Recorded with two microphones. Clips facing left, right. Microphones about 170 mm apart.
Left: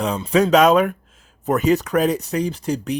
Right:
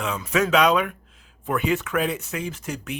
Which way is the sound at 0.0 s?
35° left (ahead or behind).